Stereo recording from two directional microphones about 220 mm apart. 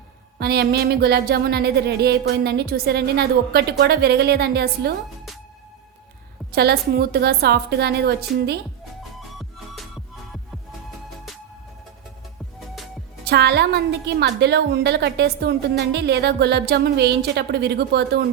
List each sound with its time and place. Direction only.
0.3 s speech: 45° right (ahead or behind)
6.5 s speech: 45° right (ahead or behind)
12.5 s music: centre (ahead or behind)
13.2 s a woman's voice: 50° right (ahead or behind)